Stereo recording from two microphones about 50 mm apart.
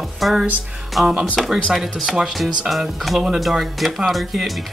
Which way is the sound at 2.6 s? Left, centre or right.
Centre.